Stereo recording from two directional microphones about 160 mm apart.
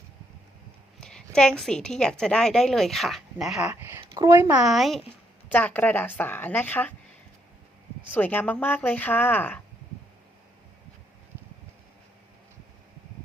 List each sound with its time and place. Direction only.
1.0 s a woman's voice: 5° left (ahead or behind)
3.7 s speech: 15° right (ahead or behind)
4.0 s speech: 25° right (ahead or behind)
4.6 s a woman's voice: centre (ahead or behind)
5.5 s speech: 10° left (ahead or behind)
8.1 s speech: 10° left (ahead or behind)